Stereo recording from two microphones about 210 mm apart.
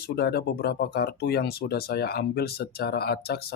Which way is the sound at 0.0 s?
50° left (ahead or behind).